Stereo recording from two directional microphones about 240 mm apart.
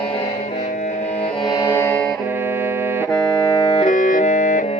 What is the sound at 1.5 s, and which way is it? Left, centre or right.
Music, centre.